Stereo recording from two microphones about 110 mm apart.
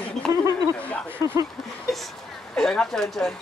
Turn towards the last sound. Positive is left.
turn(degrees=5)  # may be behind; listen again after turning